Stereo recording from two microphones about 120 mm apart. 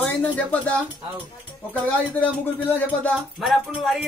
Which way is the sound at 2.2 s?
10° left (ahead or behind).